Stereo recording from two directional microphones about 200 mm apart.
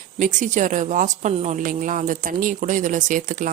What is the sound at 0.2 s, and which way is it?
A woman's voice, 40° right (ahead or behind).